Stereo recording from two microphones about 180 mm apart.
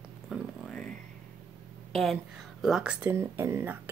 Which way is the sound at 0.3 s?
5° left (ahead or behind).